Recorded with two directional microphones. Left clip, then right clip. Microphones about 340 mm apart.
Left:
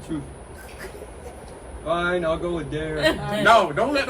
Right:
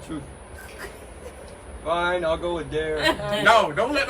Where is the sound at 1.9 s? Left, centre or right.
Centre.